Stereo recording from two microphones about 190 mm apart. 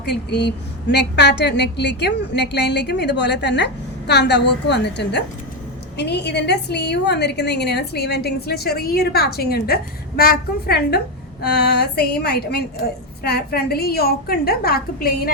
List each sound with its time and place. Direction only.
0.0 s a woman's voice: 60° left (ahead or behind)